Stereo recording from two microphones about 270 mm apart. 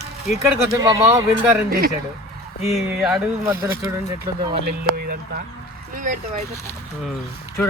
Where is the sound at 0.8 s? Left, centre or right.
Centre.